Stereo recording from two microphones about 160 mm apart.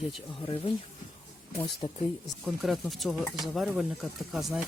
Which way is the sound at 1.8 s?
40° left (ahead or behind).